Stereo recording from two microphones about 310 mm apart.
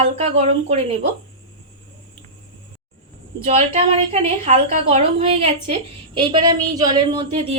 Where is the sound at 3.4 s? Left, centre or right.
Centre.